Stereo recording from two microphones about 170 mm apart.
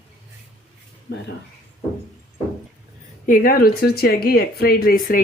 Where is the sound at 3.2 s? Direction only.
55° left (ahead or behind).